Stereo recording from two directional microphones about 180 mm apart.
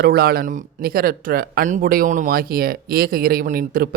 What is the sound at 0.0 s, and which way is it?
Speech, 55° right (ahead or behind).